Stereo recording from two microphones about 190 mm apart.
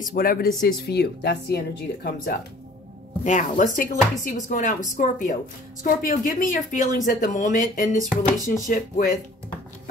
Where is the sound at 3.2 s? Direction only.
40° left (ahead or behind).